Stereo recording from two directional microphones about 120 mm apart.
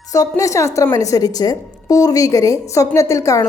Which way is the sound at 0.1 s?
30° left (ahead or behind).